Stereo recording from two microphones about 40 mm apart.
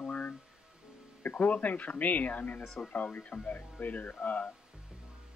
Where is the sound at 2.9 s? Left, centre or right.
Left.